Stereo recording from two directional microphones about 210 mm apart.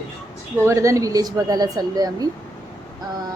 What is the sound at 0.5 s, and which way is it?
Speech, 15° right (ahead or behind).